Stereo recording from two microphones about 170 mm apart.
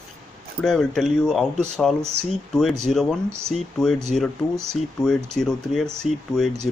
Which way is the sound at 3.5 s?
Centre (ahead or behind).